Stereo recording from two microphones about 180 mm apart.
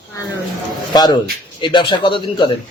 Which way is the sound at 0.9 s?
25° left (ahead or behind).